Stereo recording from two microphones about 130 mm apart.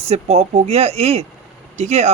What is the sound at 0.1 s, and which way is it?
Speech, 55° right (ahead or behind).